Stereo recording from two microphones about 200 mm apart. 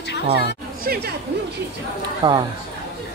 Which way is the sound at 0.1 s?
60° left (ahead or behind).